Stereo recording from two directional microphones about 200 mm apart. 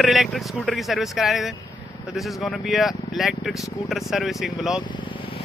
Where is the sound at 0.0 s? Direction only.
Centre (ahead or behind).